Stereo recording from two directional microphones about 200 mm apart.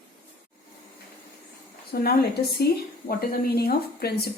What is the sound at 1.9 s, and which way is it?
Speech, 50° left (ahead or behind).